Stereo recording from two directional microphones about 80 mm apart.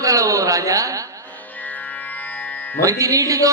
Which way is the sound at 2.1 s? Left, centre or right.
Left.